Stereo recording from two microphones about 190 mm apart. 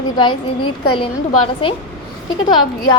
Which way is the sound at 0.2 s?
25° left (ahead or behind).